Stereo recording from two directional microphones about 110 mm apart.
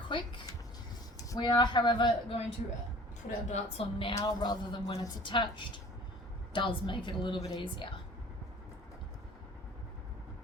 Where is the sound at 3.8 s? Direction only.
65° left (ahead or behind).